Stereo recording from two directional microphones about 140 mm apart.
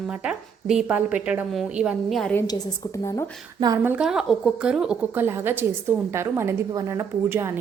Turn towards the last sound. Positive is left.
turn(degrees=-20)  # may be behind; listen again after turning